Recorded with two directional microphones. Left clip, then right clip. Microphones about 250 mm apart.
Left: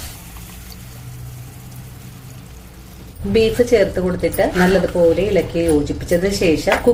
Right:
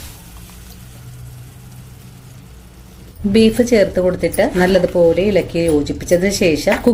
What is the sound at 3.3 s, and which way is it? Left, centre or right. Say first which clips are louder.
Speech: right 1 dB; right.